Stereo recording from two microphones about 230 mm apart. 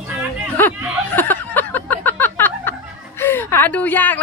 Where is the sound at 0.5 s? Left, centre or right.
Centre.